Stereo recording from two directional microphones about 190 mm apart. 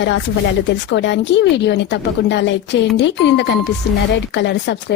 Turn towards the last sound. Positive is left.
turn(degrees=65)  # may be behind; listen again after turning